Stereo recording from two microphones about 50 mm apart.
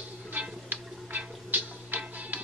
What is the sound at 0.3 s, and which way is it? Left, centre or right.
Music, right.